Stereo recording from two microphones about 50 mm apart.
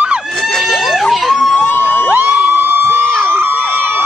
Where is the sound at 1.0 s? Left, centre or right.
Centre.